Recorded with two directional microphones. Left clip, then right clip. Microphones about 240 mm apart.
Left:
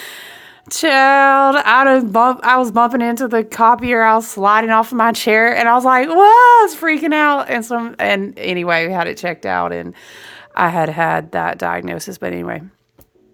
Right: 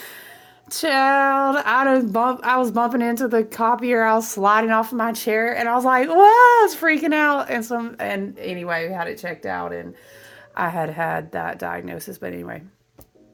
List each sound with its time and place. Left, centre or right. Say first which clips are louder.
0.7 s speech: left 6 dB; centre
8.0 s speech: left 9 dB; left
10.5 s speech: left 8 dB; left